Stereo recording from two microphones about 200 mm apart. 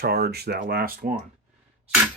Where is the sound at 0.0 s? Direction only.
50° right (ahead or behind).